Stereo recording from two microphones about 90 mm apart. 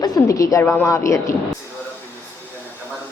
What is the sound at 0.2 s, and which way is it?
A woman's voice, 40° left (ahead or behind).